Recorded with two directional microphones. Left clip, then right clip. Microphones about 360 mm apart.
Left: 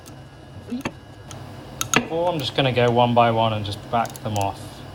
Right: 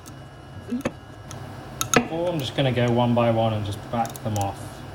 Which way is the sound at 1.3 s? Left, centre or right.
Centre.